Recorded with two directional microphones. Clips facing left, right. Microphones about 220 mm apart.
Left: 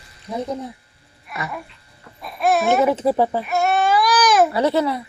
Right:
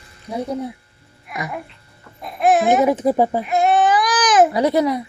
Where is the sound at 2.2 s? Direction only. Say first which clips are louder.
Right 3 dB; 20° right (ahead or behind).